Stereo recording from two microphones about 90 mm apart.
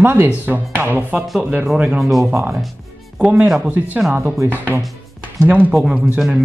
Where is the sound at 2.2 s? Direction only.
30° right (ahead or behind).